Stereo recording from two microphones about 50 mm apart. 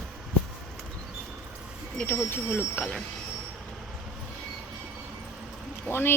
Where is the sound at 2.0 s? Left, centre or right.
Left.